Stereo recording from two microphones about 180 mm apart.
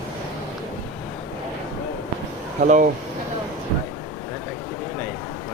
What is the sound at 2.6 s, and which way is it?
Speech, 45° right (ahead or behind).